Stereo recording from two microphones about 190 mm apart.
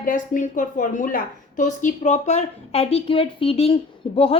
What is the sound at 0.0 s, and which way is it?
A woman's voice, 45° left (ahead or behind).